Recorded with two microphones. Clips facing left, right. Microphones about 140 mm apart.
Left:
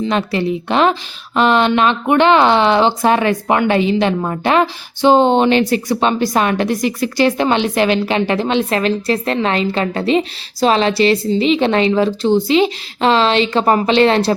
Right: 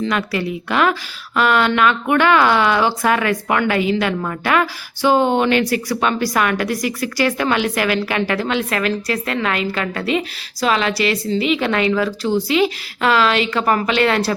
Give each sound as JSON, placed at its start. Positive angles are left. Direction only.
{"t": 0.0, "sound": "speech", "side_deg": 25}